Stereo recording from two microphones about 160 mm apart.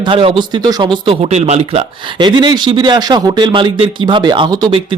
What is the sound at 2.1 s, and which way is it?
Speech, 30° right (ahead or behind).